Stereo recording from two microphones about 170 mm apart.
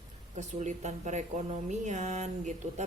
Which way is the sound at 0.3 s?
45° right (ahead or behind).